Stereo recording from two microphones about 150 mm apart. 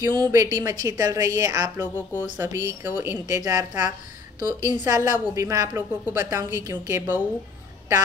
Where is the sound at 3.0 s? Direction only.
20° right (ahead or behind).